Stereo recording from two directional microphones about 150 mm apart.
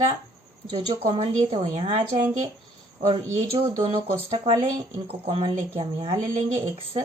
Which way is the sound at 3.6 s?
40° right (ahead or behind).